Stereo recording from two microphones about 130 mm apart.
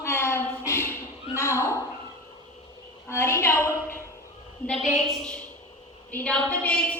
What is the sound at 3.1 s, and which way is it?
Speech, 20° left (ahead or behind).